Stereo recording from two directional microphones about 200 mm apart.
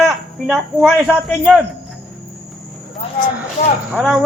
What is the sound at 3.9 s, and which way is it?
Speech, 5° right (ahead or behind).